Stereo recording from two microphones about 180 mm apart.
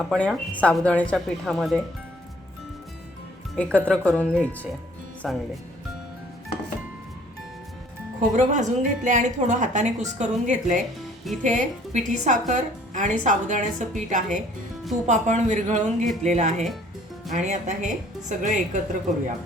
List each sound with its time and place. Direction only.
0.0 s speech: centre (ahead or behind)
3.5 s speech: 5° left (ahead or behind)
8.4 s a woman's voice: 45° right (ahead or behind)